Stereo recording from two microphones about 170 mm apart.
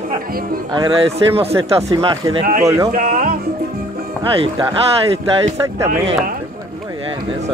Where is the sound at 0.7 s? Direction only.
30° right (ahead or behind).